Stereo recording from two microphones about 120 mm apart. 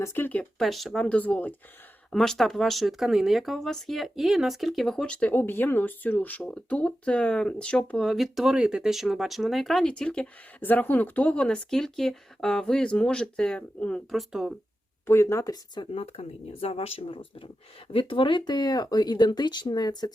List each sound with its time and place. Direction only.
0.0 s speech: 20° left (ahead or behind)
0.6 s speech: centre (ahead or behind)
15.0 s speech: 20° left (ahead or behind)
15.9 s speech: 55° left (ahead or behind); by 20.1 s 35° left (ahead or behind)